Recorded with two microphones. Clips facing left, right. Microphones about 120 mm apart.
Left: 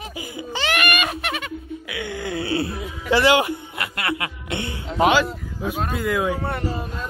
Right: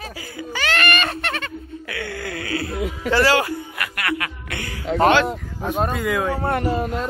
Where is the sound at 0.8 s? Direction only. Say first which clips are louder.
Right 1 dB; 10° left (ahead or behind); by 2.7 s 25° left (ahead or behind).